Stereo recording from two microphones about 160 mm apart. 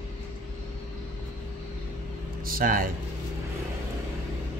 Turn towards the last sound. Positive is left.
turn(degrees=-65)  # may be behind; listen again after turning